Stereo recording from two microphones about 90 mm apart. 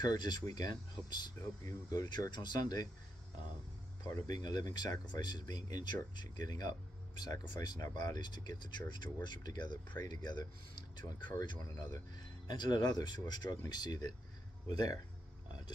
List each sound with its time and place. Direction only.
0.0 s speech: 50° left (ahead or behind)
1.4 s speech: 35° left (ahead or behind)
4.0 s speech: 45° left (ahead or behind)